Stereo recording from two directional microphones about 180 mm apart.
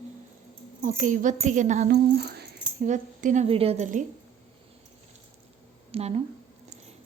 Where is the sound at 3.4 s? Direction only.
30° right (ahead or behind).